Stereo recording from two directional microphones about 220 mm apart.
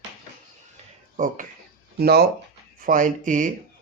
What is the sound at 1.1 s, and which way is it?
Speech, 35° right (ahead or behind).